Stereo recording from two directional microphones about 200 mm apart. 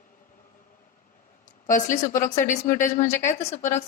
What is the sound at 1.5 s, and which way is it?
Speech, 40° left (ahead or behind).